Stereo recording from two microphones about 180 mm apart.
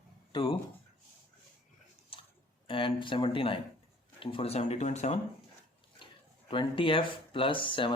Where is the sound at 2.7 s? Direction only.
30° left (ahead or behind).